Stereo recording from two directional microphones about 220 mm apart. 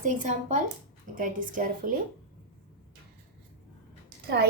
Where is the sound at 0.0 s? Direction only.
35° right (ahead or behind).